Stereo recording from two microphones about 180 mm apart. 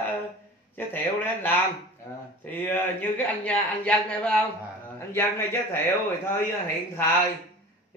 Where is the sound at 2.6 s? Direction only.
10° left (ahead or behind).